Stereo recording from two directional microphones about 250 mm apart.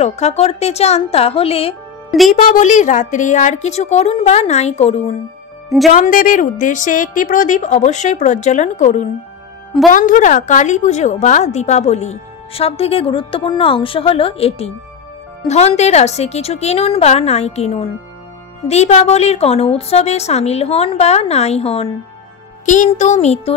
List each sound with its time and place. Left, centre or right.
0.0 s a woman's voice: left
2.0 s speech: centre
2.3 s a woman's voice: left